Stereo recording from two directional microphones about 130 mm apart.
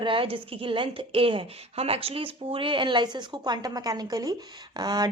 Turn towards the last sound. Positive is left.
turn(degrees=-30)  # may be behind; listen again after turning